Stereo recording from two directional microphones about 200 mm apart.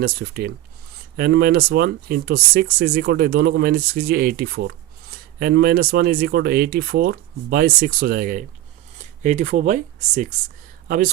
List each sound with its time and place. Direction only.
0.0 s speech: 50° right (ahead or behind)